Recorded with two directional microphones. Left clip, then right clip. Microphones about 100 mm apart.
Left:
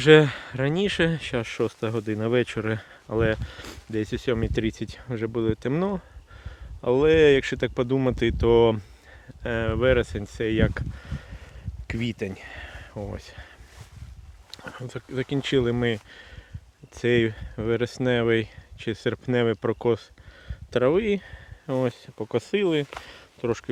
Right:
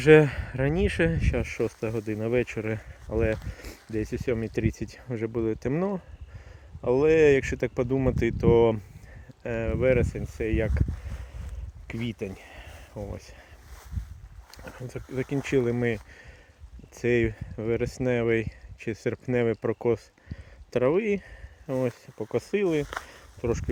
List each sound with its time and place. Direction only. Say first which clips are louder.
0.0 s speech: left 2 dB; 5° left (ahead or behind)
1.1 s speech: left 2 dB; 20° left (ahead or behind)
1.8 s speech: left 3 dB; 35° left (ahead or behind)
4.7 s speech: left 2 dB; 10° left (ahead or behind)
8.1 s speech: left 2 dB; 15° left (ahead or behind)
9.4 s speech: left 3 dB; 35° left (ahead or behind)
11.9 s a sound: left 4 dB; 40° left (ahead or behind)
13.0 s speech: left 2 dB; 40° left (ahead or behind)
13.2 s speech: left 5 dB; 30° left (ahead or behind)
14.6 s speech: left 3 dB; 30° left (ahead or behind)
14.8 s speech: left 2 dB; 15° left (ahead or behind)
21.7 s speech: left 2 dB; 35° left (ahead or behind); by 22.9 s 15° left (ahead or behind)
23.0 s a sound: left 2 dB; 15° left (ahead or behind)